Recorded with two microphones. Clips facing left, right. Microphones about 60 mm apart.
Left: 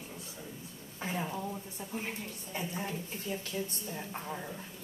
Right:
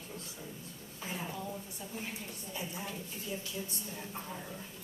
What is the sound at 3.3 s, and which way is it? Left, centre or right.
Speech, left.